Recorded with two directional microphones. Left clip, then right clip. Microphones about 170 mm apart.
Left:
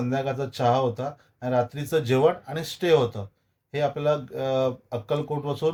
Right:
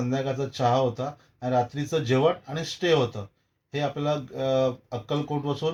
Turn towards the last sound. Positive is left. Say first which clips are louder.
# left 2 dB
turn(degrees=25)  # may be behind; listen again after turning